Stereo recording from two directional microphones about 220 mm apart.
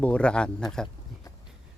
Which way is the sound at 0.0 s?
5° left (ahead or behind).